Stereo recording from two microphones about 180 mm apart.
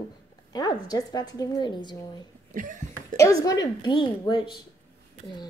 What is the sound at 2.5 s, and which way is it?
Cough, 45° right (ahead or behind).